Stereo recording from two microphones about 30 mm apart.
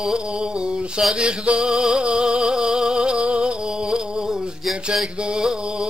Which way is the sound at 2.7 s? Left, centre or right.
Centre.